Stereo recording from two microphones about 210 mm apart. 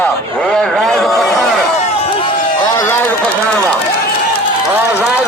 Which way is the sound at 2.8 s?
10° left (ahead or behind).